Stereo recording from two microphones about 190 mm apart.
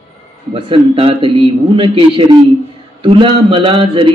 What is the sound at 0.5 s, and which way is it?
Speech, 25° right (ahead or behind).